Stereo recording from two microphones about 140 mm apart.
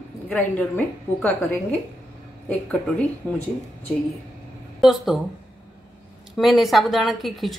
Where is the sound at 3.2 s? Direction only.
10° left (ahead or behind).